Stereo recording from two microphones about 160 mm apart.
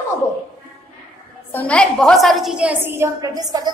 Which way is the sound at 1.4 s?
10° left (ahead or behind).